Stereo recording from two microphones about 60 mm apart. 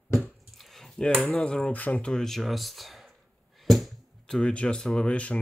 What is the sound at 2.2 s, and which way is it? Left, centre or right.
Speech, centre.